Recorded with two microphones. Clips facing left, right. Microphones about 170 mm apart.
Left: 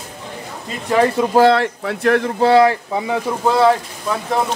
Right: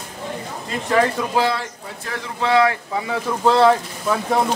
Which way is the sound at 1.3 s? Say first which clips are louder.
Left 8 dB; 60° left (ahead or behind).